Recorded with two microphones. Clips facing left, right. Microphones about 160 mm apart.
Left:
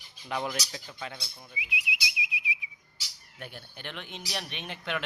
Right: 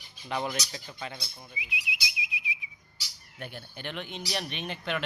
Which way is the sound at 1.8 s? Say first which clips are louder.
Left 1 dB; 5° left (ahead or behind).